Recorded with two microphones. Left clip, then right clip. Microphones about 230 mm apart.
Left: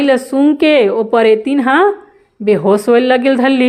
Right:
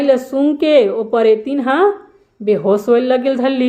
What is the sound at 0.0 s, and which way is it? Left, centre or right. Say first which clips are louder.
A woman's voice: left 2 dB; left.